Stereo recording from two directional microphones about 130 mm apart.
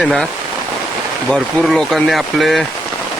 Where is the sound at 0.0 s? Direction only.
Centre (ahead or behind).